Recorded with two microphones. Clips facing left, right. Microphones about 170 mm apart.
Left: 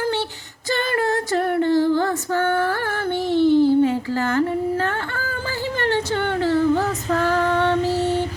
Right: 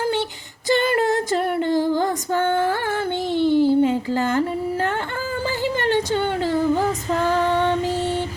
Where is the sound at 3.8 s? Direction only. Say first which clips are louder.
Even; 20° right (ahead or behind).